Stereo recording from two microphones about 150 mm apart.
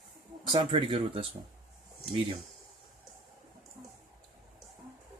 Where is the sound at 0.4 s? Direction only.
30° right (ahead or behind).